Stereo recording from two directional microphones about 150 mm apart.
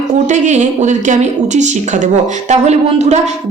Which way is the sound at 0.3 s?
50° right (ahead or behind).